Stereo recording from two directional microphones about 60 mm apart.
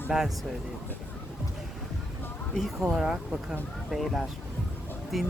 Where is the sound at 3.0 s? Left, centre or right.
Centre.